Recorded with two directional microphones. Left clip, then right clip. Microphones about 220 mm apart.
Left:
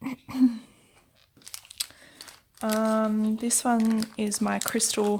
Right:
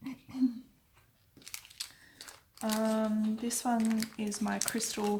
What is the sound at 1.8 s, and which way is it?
Crunch, 45° left (ahead or behind).